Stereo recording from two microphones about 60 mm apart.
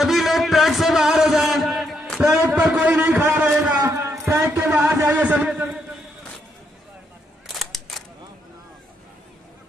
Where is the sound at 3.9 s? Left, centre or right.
Right.